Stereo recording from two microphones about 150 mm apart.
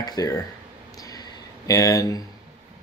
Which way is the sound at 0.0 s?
25° left (ahead or behind).